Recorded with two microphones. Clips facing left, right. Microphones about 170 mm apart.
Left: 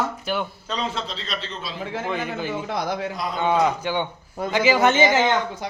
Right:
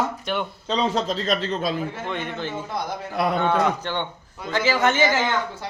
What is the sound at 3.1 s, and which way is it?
Speech, 65° right (ahead or behind).